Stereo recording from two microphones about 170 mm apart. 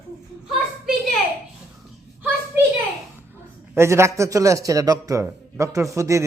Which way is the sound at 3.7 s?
15° right (ahead or behind).